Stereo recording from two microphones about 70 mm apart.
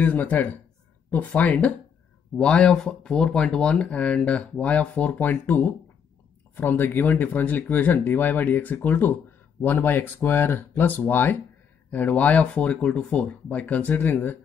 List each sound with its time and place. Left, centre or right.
0.0 s speech: left